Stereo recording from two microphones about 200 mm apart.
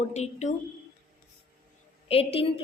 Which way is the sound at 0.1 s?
35° left (ahead or behind).